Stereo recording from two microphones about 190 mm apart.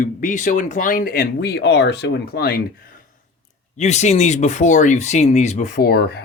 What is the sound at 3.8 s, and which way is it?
Speech, 35° left (ahead or behind).